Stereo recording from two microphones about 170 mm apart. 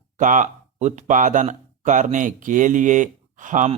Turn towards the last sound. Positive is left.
turn(degrees=-50)  # may be behind; listen again after turning